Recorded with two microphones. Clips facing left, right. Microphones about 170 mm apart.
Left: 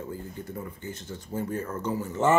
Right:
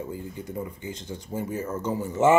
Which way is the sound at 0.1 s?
15° right (ahead or behind).